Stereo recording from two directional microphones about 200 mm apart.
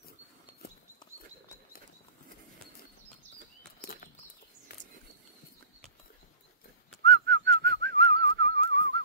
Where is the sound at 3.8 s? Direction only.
45° left (ahead or behind).